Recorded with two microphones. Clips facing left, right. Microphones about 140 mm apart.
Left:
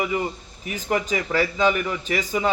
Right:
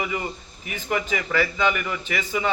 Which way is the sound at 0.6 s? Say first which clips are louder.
Left 2 dB; 40° left (ahead or behind).